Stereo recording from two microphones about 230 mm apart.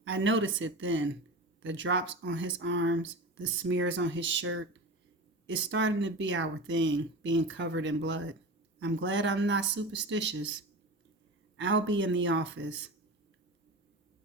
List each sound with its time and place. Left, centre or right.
0.0 s speech: right